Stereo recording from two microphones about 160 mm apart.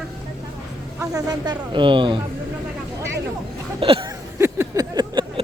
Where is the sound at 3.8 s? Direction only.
35° right (ahead or behind).